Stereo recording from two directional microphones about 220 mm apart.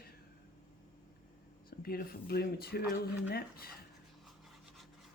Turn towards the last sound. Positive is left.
turn(degrees=45)  # may be behind; listen again after turning